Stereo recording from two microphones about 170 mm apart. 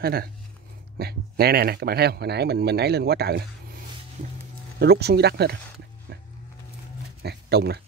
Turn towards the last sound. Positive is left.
turn(degrees=-75)  # may be behind; listen again after turning